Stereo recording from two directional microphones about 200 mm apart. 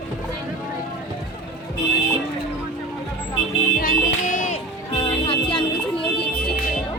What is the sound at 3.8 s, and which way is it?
Music, 40° left (ahead or behind).